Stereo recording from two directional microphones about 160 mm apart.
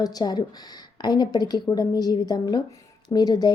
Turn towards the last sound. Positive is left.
turn(degrees=25)  # may be behind; listen again after turning